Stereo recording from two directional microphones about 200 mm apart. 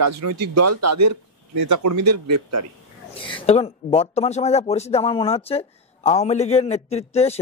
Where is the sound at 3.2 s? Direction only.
25° left (ahead or behind).